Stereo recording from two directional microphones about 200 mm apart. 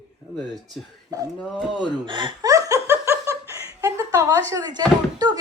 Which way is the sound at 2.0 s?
25° right (ahead or behind).